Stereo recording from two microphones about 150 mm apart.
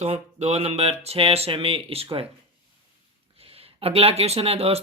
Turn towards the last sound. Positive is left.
turn(degrees=-40)  # may be behind; listen again after turning